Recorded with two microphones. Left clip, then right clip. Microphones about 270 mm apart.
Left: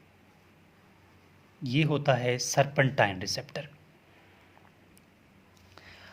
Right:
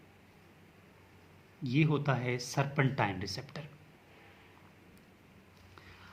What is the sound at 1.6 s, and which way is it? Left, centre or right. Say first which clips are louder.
Speech: left 5 dB; left.